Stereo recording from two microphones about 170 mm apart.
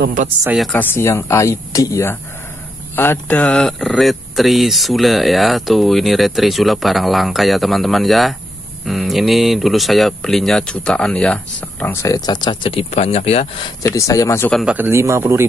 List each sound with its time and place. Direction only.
0.0 s a woman's voice: 50° right (ahead or behind)
0.5 s speech: centre (ahead or behind)
0.7 s speech: 15° left (ahead or behind); by 13.7 s 40° left (ahead or behind)
13.8 s speech: 20° left (ahead or behind)
14.5 s a man's voice: 5° right (ahead or behind)